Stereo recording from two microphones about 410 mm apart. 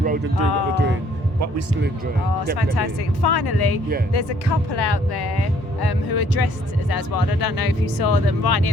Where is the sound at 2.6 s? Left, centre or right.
Left.